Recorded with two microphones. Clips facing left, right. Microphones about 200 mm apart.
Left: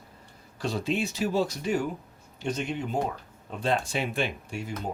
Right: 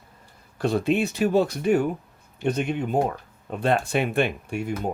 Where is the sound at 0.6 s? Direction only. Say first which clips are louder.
Right 6 dB; 60° right (ahead or behind).